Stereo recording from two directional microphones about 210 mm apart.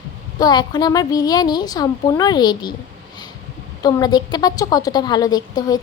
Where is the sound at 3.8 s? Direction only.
20° left (ahead or behind).